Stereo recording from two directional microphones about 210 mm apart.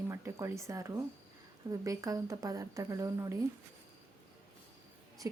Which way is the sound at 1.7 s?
15° right (ahead or behind).